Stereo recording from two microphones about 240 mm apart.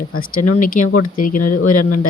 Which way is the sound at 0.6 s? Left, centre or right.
Left.